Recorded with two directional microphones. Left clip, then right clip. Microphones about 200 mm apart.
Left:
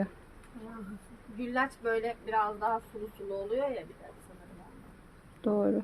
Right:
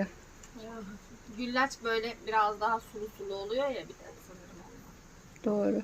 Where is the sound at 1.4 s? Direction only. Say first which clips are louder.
Right 1 dB; 5° left (ahead or behind).